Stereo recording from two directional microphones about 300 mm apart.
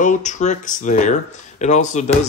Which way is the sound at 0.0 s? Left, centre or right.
Left.